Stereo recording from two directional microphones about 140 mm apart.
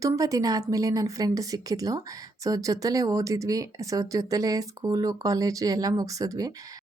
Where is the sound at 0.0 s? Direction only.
25° right (ahead or behind).